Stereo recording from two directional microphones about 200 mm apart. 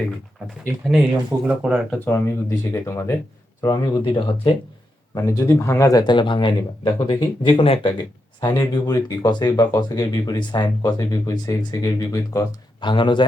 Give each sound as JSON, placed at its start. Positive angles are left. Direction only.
{"t": 1.5, "sound": "speech", "side_deg": -5}
{"t": 2.0, "sound": "speech", "side_deg": 10}